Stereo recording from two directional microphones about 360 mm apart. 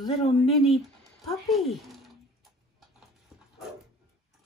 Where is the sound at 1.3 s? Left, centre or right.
Centre.